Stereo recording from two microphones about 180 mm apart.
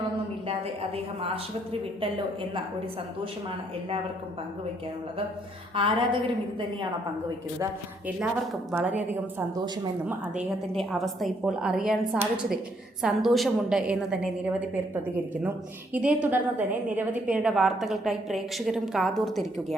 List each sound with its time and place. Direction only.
5.7 s a woman's voice: 30° right (ahead or behind)
7.6 s speech: 10° right (ahead or behind)
10.7 s a woman's voice: centre (ahead or behind)